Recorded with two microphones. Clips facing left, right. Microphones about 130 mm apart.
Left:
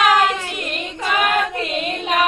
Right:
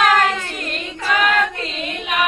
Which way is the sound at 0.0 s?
5° left (ahead or behind).